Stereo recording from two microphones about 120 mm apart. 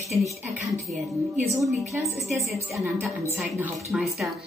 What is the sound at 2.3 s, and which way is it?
Speech, 25° right (ahead or behind).